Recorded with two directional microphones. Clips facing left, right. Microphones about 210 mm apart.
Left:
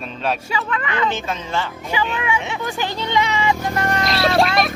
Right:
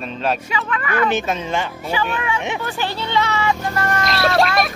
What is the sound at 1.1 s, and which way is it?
Speech, 15° right (ahead or behind).